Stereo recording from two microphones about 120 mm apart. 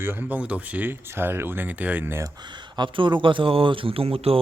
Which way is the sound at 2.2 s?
40° right (ahead or behind).